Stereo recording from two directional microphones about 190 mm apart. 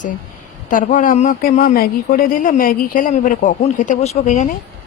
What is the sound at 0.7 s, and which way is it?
Speech, 45° left (ahead or behind).